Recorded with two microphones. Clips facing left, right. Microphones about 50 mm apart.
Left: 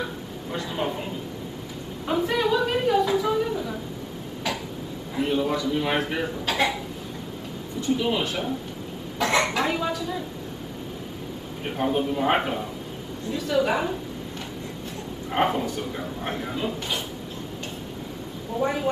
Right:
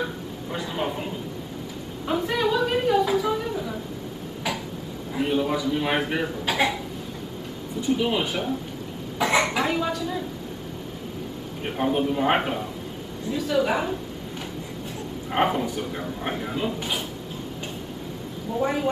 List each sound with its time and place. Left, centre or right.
0.0 s speech: centre
2.0 s a sound: centre
5.1 s speech: centre
7.8 s speech: centre
11.6 s speech: centre
15.3 s speech: centre
18.6 s speech: centre